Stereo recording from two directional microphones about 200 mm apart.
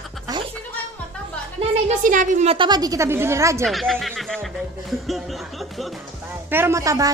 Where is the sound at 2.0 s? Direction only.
40° right (ahead or behind); by 3.6 s 15° right (ahead or behind).